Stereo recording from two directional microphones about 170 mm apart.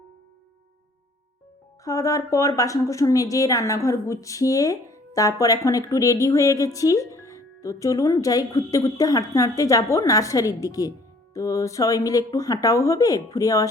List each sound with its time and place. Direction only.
1.8 s a woman's voice: 20° left (ahead or behind)